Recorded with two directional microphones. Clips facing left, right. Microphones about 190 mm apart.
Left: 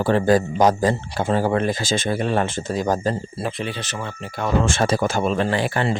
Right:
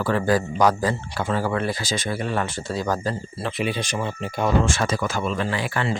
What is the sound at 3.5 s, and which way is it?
Speech, 15° right (ahead or behind).